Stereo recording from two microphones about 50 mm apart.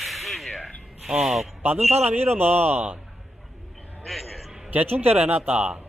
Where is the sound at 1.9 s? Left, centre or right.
Right.